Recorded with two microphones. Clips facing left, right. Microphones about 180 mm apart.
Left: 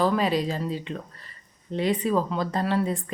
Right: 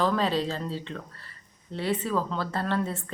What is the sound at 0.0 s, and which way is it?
A woman's voice, 10° left (ahead or behind).